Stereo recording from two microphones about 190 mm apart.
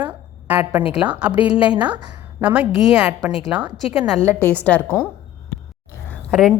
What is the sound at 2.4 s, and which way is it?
A woman's voice, 5° right (ahead or behind).